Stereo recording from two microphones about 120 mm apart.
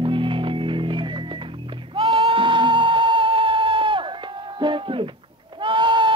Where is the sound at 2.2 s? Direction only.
45° right (ahead or behind).